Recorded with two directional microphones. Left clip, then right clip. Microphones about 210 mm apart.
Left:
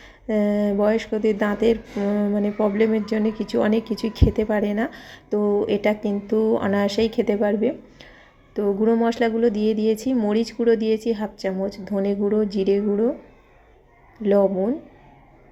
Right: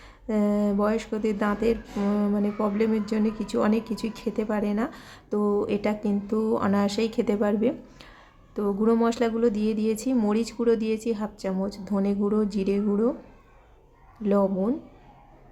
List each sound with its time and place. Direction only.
0.0 s a sound: 5° left (ahead or behind)
1.1 s a woman's voice: 5° left (ahead or behind)
6.0 s speech: 30° right (ahead or behind)
6.3 s a woman's voice: 5° left (ahead or behind)
14.2 s a woman's voice: 5° left (ahead or behind)